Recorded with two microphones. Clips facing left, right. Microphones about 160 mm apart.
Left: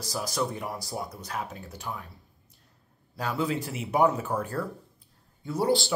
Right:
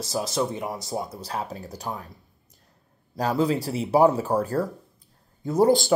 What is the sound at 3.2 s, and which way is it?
A man's voice, 35° right (ahead or behind).